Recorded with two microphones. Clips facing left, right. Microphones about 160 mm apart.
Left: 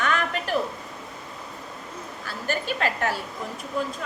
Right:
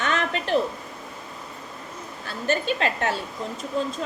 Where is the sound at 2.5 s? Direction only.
25° right (ahead or behind).